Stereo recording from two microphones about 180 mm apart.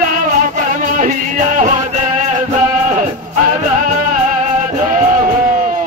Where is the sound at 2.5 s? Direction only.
45° right (ahead or behind).